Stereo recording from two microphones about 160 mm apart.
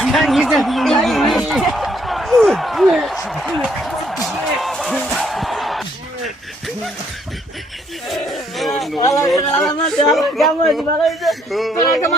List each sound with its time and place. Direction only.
0.0 s a man's voice: centre (ahead or behind)
3.2 s music: centre (ahead or behind)
8.1 s a sound: centre (ahead or behind)
9.0 s speech: 20° left (ahead or behind)
9.6 s a man's voice: 5° left (ahead or behind)